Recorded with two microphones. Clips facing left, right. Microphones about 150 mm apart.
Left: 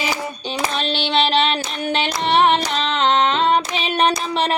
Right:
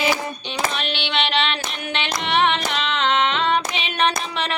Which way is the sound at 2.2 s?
40° left (ahead or behind).